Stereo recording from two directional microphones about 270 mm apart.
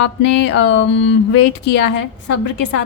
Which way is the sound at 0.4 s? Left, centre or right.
Left.